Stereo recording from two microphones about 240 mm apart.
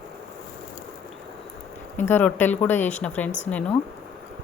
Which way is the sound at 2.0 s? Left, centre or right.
Centre.